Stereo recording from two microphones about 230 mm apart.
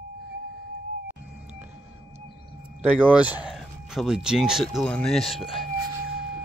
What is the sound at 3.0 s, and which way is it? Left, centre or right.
Speech, centre.